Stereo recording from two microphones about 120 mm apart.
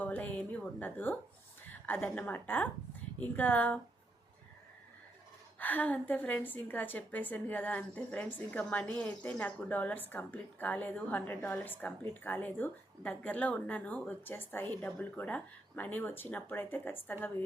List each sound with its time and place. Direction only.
0.0 s a woman's voice: 10° left (ahead or behind)
5.5 s a woman's voice: 15° left (ahead or behind)